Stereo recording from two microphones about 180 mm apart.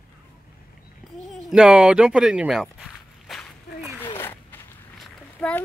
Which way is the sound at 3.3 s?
Centre (ahead or behind).